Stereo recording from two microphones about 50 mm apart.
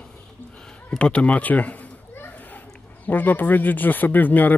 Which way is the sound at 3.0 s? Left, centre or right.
Left.